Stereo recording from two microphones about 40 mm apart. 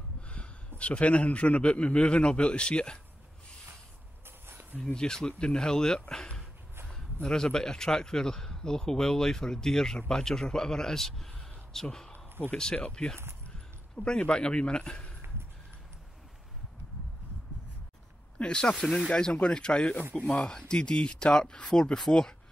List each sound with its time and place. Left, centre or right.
0.3 s a man's voice: left
4.7 s a man's voice: left
12.1 s a sound: left
12.7 s a man's voice: left
18.4 s a man's voice: left